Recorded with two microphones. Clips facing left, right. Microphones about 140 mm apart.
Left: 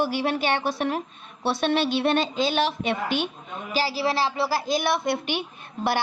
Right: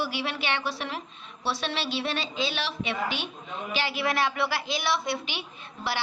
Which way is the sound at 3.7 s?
35° left (ahead or behind).